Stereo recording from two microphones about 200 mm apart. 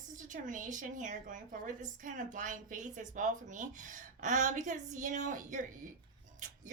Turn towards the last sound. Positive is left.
turn(degrees=-40)  # may be behind; listen again after turning